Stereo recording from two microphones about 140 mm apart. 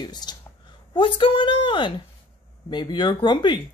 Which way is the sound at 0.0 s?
30° left (ahead or behind).